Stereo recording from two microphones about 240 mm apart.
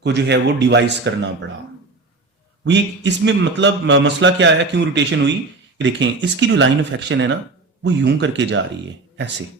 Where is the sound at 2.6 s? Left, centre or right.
Right.